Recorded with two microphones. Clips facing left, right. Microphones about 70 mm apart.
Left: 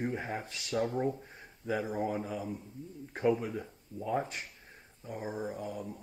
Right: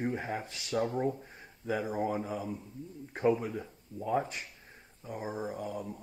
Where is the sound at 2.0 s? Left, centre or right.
Right.